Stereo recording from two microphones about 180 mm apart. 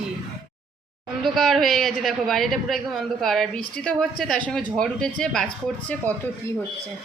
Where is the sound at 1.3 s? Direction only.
Centre (ahead or behind).